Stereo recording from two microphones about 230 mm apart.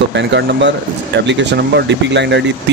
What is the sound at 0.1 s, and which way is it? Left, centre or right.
Speech, right.